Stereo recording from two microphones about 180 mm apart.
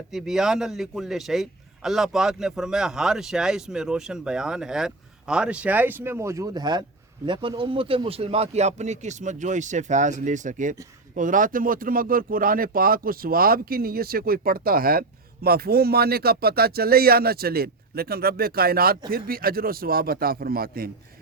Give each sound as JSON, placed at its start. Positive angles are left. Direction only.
{"t": 0.1, "sound": "a man's voice", "side_deg": -5}